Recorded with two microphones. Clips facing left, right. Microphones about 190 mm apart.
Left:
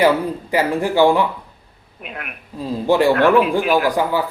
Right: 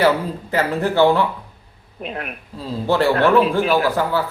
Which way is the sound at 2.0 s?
35° right (ahead or behind).